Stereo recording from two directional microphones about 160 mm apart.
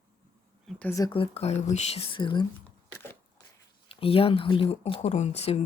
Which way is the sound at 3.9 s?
35° left (ahead or behind).